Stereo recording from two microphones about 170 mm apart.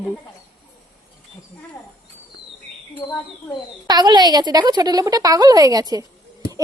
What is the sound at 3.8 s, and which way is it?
A woman's voice, 25° right (ahead or behind).